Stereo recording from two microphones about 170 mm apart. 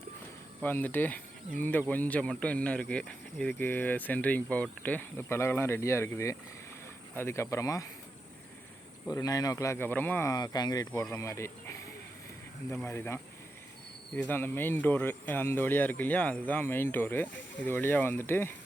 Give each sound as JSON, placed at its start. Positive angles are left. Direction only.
{"t": 0.6, "sound": "speech", "side_deg": 10}
{"t": 9.0, "sound": "speech", "side_deg": 20}
{"t": 14.2, "sound": "speech", "side_deg": 10}